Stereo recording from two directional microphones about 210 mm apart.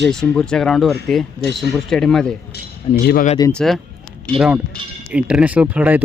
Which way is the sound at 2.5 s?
45° left (ahead or behind).